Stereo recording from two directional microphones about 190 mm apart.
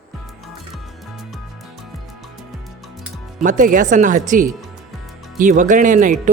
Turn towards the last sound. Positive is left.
turn(degrees=-45)  # may be behind; listen again after turning